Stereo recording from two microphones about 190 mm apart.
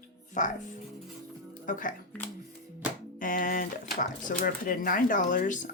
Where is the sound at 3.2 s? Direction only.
45° left (ahead or behind).